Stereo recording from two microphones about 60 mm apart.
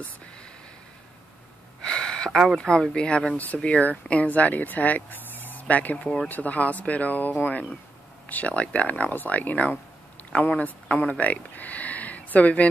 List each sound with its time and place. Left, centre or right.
1.8 s gasp: centre
2.3 s speech: centre
2.7 s speech: centre